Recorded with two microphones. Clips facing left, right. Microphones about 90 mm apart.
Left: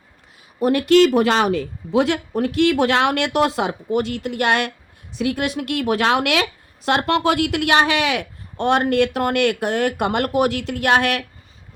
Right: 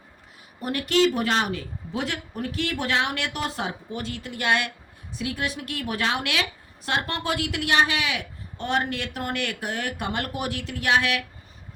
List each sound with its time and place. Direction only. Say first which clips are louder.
0.6 s a woman's voice: left 8 dB; 90° left; by 11.2 s 55° left (ahead or behind)